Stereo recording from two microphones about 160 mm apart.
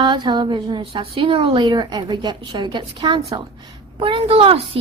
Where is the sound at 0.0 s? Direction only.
30° right (ahead or behind).